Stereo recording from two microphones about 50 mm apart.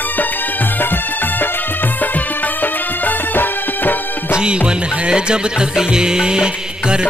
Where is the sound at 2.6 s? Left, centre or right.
Left.